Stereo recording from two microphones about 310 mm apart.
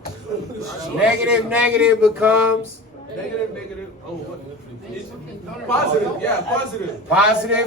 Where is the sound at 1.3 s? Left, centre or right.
Centre.